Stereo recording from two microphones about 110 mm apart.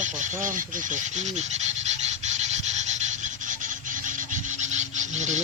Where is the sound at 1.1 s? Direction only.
90° right.